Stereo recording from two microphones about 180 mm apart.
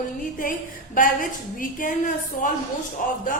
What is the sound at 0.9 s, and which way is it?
A woman's voice, 50° left (ahead or behind).